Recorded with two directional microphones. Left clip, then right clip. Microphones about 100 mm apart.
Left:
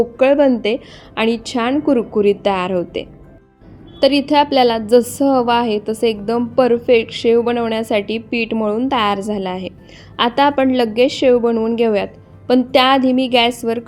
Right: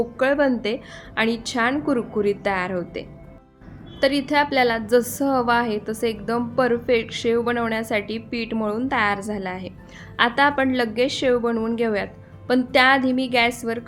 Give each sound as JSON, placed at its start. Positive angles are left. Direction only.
{"t": 0.0, "sound": "a woman's voice", "side_deg": 20}